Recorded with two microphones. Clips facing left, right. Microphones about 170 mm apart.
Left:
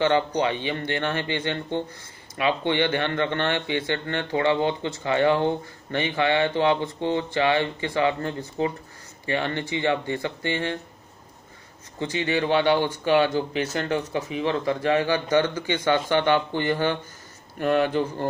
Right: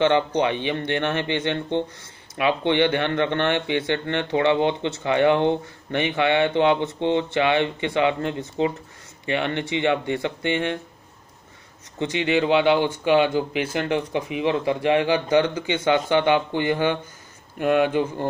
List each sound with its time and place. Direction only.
0.0 s speech: 20° right (ahead or behind)
12.0 s speech: 15° right (ahead or behind)